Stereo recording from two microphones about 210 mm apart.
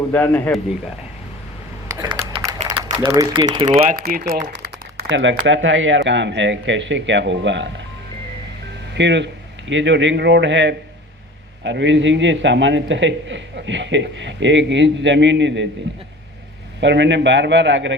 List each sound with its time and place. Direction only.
0.1 s a man's voice: 10° left (ahead or behind)
1.9 s computer keyboard: 15° right (ahead or behind)
2.6 s speech: 20° right (ahead or behind)
3.7 s speech: 40° right (ahead or behind)
5.0 s a man's voice: 60° right (ahead or behind)
9.0 s a man's voice: 55° right (ahead or behind)
16.8 s a man's voice: 60° right (ahead or behind)